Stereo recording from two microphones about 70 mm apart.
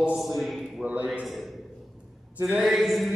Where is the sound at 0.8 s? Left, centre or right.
Centre.